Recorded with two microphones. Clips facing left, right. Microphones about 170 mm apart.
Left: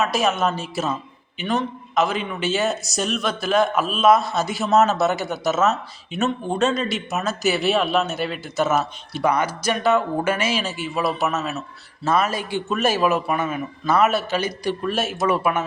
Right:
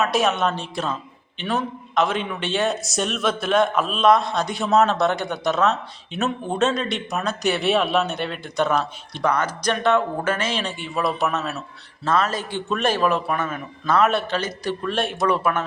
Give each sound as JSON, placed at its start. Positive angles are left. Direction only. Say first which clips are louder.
{"t": 0.0, "sound": "a man's voice", "louder": "even", "side_deg": 0}